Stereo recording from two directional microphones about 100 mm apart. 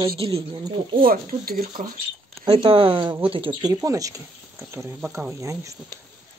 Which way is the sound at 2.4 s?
55° right (ahead or behind).